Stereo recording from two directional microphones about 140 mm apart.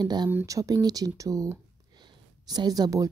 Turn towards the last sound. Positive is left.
turn(degrees=-25)  # may be behind; listen again after turning